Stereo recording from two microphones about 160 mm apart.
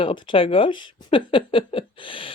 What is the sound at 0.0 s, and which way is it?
Speech, 30° left (ahead or behind).